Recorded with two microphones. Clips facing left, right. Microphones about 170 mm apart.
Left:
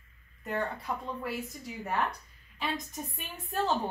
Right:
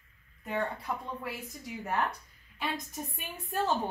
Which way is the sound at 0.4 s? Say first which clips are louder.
Even; centre (ahead or behind).